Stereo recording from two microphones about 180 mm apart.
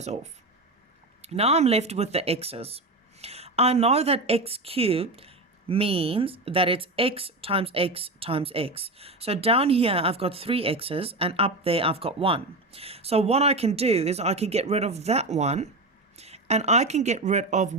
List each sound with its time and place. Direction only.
0.0 s speech: 40° right (ahead or behind)